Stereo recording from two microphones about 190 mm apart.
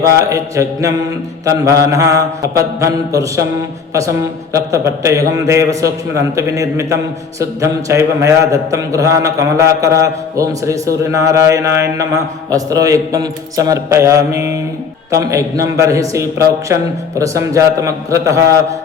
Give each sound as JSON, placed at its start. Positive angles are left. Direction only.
{"t": 0.2, "sound": "a man's voice", "side_deg": -15}